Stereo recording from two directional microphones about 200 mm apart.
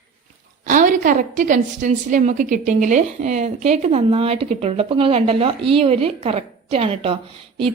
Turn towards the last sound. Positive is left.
turn(degrees=-25)  # may be behind; listen again after turning